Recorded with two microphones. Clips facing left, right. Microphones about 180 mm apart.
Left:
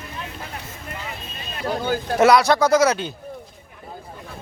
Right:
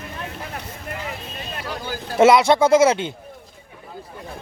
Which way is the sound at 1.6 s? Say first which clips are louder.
Left 9 dB; 55° left (ahead or behind).